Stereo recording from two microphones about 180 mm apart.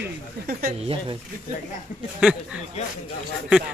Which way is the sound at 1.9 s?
45° left (ahead or behind).